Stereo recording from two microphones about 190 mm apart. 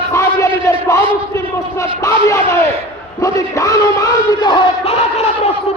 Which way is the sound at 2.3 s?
15° left (ahead or behind).